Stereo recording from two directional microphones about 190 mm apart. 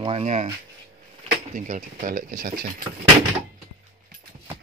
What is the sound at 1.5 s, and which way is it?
Speech, 40° right (ahead or behind).